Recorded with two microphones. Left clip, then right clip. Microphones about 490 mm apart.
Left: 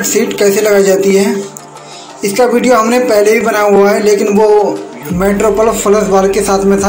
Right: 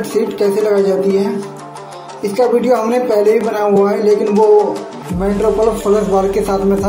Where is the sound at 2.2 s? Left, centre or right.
Right.